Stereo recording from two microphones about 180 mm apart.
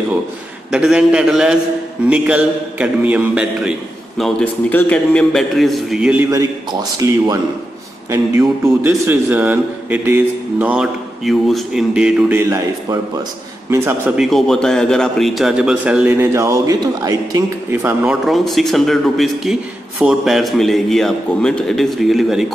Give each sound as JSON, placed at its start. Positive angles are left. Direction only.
{"t": 0.7, "sound": "a man's voice", "side_deg": -5}
{"t": 4.2, "sound": "a man's voice", "side_deg": 5}
{"t": 6.3, "sound": "a man's voice", "side_deg": -20}
{"t": 12.4, "sound": "a man's voice", "side_deg": -15}
{"t": 18.2, "sound": "a man's voice", "side_deg": 0}